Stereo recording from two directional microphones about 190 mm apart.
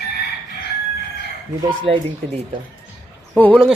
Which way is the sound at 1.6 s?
25° right (ahead or behind).